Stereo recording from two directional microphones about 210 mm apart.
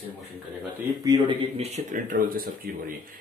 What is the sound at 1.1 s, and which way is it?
Speech, 25° right (ahead or behind).